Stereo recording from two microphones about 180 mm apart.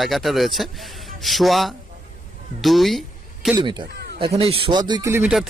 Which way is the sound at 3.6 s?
25° right (ahead or behind).